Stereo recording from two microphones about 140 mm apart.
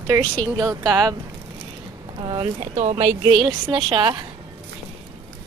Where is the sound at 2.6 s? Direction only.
55° right (ahead or behind).